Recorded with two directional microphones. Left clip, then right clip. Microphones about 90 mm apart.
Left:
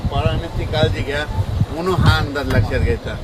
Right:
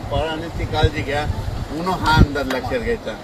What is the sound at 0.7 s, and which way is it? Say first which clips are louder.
Speech: left 1 dB; 25° left (ahead or behind).